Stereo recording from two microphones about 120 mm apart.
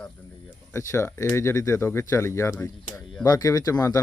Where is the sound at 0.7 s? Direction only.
25° left (ahead or behind).